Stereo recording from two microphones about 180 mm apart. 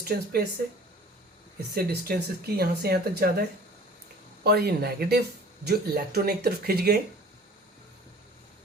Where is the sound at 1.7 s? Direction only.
55° right (ahead or behind).